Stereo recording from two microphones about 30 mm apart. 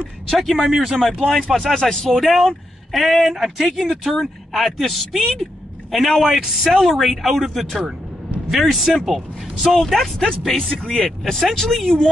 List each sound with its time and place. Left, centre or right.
0.3 s speech: centre
0.6 s speech: centre
1.2 s speech: centre
1.8 s speech: left
2.1 s a man's voice: centre
8.5 s speech: centre
10.1 s speech: centre